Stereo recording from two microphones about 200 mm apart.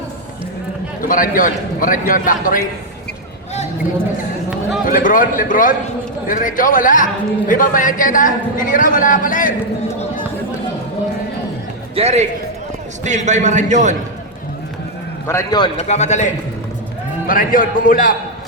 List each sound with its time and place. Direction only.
1.0 s a man's voice: 45° left (ahead or behind)
4.9 s a man's voice: 45° left (ahead or behind)
11.9 s a man's voice: 35° right (ahead or behind)
15.3 s a man's voice: 15° left (ahead or behind)
15.9 s a man's voice: 35° left (ahead or behind)